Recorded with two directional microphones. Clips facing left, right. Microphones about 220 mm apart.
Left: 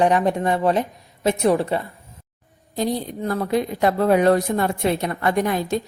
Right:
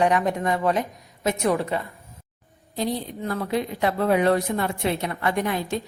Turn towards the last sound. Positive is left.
turn(degrees=45)  # may be behind; listen again after turning